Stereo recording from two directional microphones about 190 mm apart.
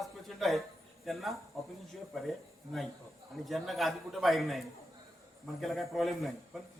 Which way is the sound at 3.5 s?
Centre (ahead or behind).